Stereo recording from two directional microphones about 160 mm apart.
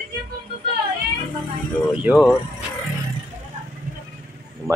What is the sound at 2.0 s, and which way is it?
Speech, centre (ahead or behind).